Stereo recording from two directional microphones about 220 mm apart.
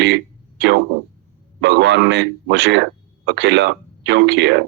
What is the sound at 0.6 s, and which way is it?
Speech, 50° right (ahead or behind).